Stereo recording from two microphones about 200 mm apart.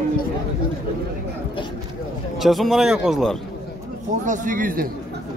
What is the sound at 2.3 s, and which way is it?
Speech, centre (ahead or behind).